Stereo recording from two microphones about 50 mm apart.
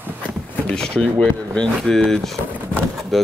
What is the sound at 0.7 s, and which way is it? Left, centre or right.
Speech, centre.